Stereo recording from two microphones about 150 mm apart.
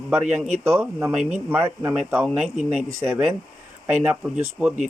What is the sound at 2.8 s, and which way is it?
Speech, 20° right (ahead or behind).